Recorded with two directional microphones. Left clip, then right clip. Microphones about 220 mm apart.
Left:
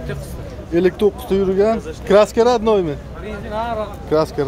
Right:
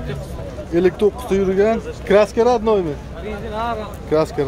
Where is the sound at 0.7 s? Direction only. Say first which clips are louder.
Even; 10° left (ahead or behind).